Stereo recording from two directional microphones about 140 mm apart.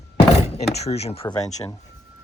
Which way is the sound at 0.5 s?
50° left (ahead or behind).